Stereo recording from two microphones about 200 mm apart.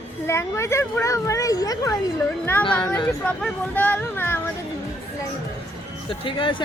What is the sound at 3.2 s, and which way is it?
Speech, 10° left (ahead or behind).